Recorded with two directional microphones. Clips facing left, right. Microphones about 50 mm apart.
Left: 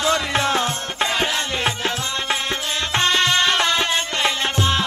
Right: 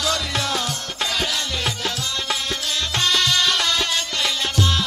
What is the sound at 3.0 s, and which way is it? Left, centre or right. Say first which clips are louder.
Music: left 2 dB; left.